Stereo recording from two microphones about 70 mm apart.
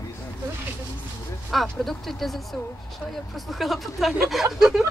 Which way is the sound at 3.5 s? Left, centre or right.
Centre.